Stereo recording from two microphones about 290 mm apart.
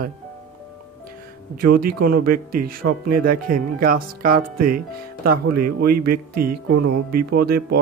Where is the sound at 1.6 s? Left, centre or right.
Right.